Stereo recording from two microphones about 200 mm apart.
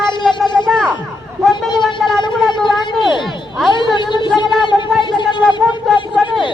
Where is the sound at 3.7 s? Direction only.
25° left (ahead or behind).